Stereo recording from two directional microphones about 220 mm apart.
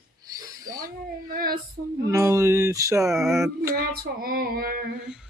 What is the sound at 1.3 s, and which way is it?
Child singing, 40° right (ahead or behind).